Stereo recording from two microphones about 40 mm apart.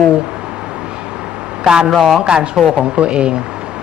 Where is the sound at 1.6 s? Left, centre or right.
Centre.